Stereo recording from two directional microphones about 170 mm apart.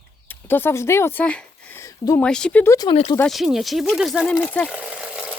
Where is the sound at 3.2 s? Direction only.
Centre (ahead or behind).